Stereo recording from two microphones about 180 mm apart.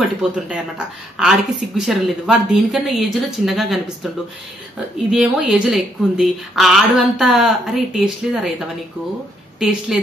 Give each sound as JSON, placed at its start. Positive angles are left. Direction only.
{"t": 0.2, "sound": "speech", "side_deg": -5}
{"t": 5.1, "sound": "speech", "side_deg": -5}